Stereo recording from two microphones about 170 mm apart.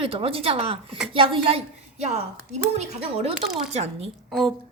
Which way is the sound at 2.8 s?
35° right (ahead or behind).